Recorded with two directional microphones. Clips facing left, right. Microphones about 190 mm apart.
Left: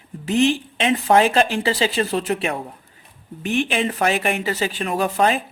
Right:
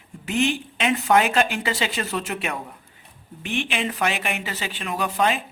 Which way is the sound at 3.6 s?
40° left (ahead or behind).